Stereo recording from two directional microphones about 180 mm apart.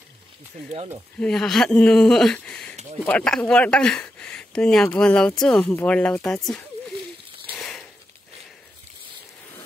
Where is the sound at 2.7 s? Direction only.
40° right (ahead or behind).